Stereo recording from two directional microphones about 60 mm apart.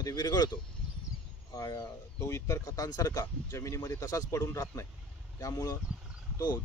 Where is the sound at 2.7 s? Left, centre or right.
Left.